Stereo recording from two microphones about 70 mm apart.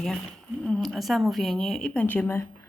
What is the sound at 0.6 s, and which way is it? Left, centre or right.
A woman's voice, centre.